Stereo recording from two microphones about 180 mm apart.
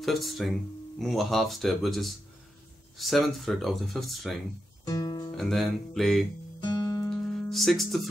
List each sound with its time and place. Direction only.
0.0 s speech: centre (ahead or behind)
4.8 s music: 20° left (ahead or behind)
5.4 s speech: centre (ahead or behind)
6.6 s music: 20° left (ahead or behind)
7.1 s music: centre (ahead or behind)